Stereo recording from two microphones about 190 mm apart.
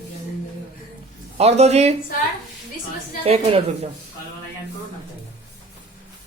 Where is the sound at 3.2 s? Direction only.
30° right (ahead or behind).